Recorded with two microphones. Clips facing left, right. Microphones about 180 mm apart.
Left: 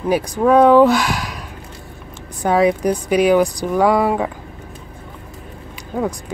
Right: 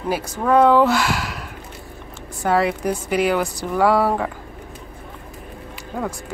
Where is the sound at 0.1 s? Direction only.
15° left (ahead or behind).